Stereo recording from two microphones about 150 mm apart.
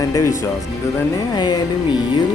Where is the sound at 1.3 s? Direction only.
30° left (ahead or behind).